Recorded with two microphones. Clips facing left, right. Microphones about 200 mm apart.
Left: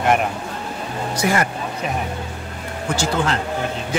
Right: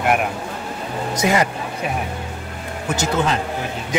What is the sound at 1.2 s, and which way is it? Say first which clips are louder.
Speech: right 2 dB; 20° right (ahead or behind).